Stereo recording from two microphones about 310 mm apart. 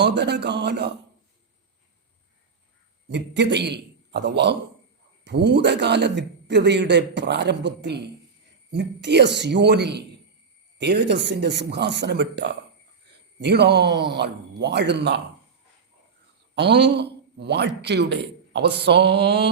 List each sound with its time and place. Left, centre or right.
0.0 s a man's voice: right
3.1 s a man's voice: right
16.6 s a man's voice: right